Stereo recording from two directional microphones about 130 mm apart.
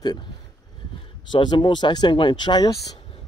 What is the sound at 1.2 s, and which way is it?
Speech, 40° left (ahead or behind).